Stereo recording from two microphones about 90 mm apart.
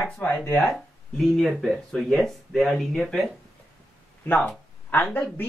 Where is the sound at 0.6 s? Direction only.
5° left (ahead or behind).